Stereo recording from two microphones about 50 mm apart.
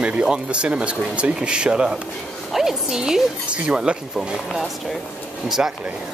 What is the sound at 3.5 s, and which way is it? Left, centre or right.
Speech, centre.